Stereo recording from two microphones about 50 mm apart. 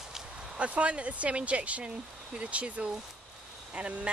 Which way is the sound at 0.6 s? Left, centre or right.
Right.